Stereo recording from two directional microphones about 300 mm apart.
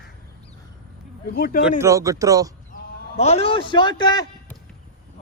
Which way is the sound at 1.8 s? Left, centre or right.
Centre.